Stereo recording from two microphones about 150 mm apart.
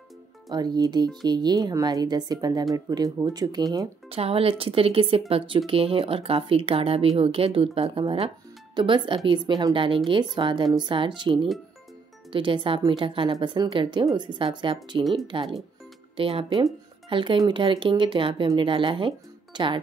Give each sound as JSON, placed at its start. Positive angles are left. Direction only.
{"t": 0.5, "sound": "speech", "side_deg": -25}
{"t": 4.1, "sound": "speech", "side_deg": -40}